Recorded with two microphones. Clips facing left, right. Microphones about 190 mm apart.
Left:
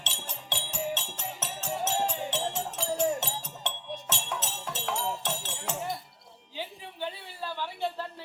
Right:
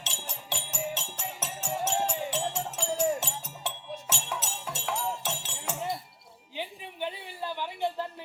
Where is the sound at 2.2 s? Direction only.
Centre (ahead or behind).